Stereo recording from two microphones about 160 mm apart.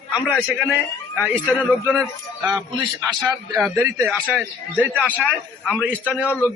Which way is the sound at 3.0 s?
10° right (ahead or behind).